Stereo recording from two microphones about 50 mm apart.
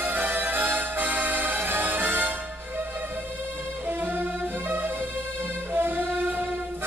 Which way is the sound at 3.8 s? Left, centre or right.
Right.